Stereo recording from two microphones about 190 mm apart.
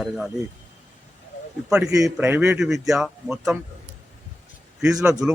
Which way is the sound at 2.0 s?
5° right (ahead or behind).